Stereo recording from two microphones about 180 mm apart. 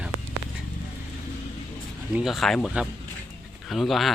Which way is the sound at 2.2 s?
Centre (ahead or behind).